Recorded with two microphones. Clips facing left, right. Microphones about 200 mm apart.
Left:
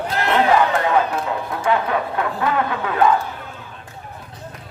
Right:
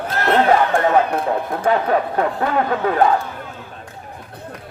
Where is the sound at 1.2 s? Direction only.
50° right (ahead or behind).